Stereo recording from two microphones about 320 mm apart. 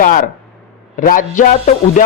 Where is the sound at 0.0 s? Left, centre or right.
Left.